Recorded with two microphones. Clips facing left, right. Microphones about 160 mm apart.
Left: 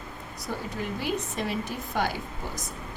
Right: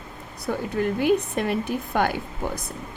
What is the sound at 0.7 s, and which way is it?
A woman's voice, 60° right (ahead or behind).